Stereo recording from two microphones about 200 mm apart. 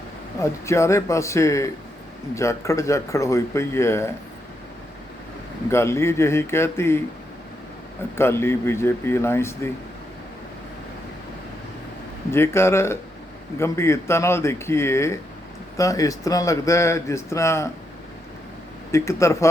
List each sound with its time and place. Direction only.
0.6 s speech: 15° left (ahead or behind)
5.6 s speech: 15° left (ahead or behind)
8.1 s speech: 10° left (ahead or behind)
12.3 s speech: 15° left (ahead or behind)
18.9 s speech: 15° left (ahead or behind)